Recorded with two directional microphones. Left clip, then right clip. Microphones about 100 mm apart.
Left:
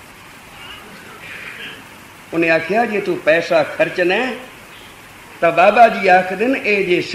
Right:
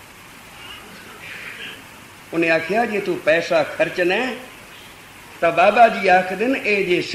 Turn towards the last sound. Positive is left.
turn(degrees=35)  # may be behind; listen again after turning